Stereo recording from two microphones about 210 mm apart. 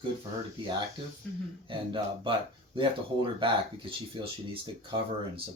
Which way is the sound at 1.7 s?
25° right (ahead or behind).